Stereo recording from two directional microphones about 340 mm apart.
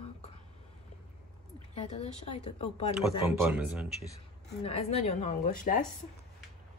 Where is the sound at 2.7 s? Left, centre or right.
Centre.